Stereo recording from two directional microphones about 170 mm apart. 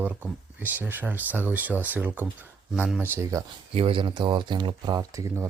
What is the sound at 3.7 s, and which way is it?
Speech, 30° right (ahead or behind).